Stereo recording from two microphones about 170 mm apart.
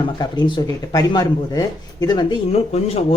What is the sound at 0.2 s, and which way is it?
Speech, 25° left (ahead or behind).